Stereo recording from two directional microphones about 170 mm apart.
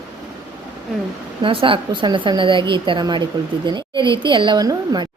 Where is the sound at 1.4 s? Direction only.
30° right (ahead or behind).